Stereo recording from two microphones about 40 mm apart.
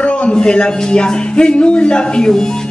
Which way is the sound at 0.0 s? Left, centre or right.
Left.